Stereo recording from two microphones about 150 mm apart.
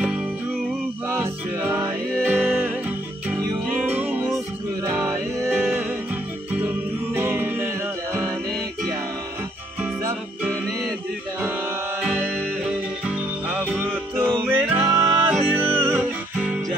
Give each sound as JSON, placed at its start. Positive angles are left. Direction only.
{"t": 1.0, "sound": "music", "side_deg": -15}
{"t": 7.2, "sound": "music", "side_deg": -15}
{"t": 9.8, "sound": "music", "side_deg": -10}
{"t": 12.3, "sound": "music", "side_deg": -5}